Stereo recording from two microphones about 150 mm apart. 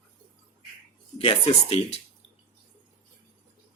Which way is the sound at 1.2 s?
40° left (ahead or behind).